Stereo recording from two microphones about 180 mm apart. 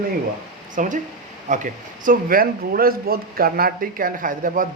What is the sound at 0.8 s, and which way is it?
Speech, 45° right (ahead or behind).